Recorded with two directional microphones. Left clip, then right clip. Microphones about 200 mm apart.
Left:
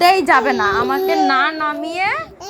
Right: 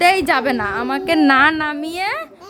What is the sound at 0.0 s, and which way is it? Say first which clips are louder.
A woman's voice: left 2 dB; 5° right (ahead or behind).